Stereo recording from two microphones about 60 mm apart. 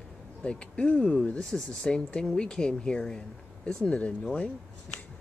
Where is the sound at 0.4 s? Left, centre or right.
Centre.